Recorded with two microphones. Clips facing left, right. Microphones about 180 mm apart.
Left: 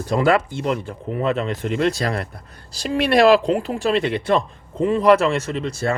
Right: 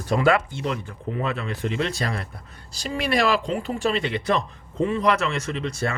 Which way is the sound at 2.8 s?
65° left (ahead or behind).